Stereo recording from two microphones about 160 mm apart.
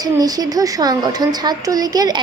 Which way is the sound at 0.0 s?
25° right (ahead or behind).